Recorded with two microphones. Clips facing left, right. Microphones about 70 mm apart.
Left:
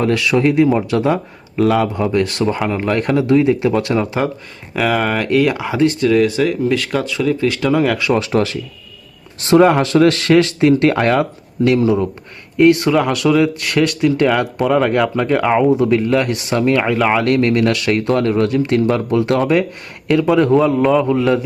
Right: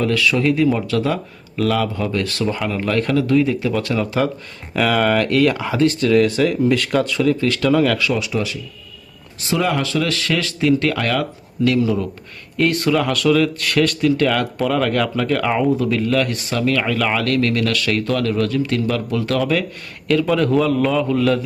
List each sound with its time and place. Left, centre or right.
0.0 s a man's voice: left
4.7 s speech: centre
8.1 s speech: left
9.5 s a man's voice: left
20.2 s a man's voice: centre